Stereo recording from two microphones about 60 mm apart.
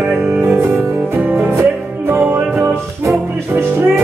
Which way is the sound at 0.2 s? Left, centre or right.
Right.